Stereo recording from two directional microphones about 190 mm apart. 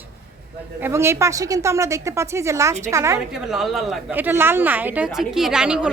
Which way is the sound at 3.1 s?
5° right (ahead or behind).